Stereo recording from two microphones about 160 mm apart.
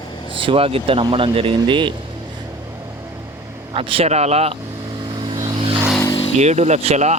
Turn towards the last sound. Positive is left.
turn(degrees=-45)  # may be behind; listen again after turning